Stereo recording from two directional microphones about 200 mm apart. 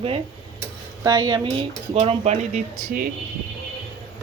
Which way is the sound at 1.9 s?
30° right (ahead or behind).